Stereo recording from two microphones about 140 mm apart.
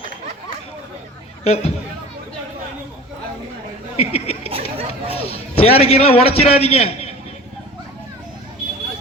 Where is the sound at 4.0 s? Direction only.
45° left (ahead or behind).